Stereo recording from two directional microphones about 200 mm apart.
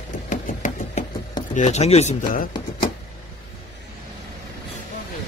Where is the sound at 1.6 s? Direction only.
35° left (ahead or behind).